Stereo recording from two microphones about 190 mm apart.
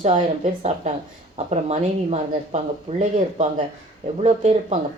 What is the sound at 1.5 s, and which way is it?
Speech, 35° right (ahead or behind).